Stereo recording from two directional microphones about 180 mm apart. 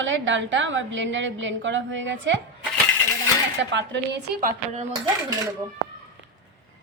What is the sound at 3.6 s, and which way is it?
Speech, 80° right.